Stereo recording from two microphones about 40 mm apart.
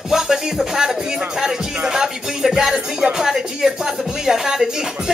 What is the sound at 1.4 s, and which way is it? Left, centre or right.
Speech, centre.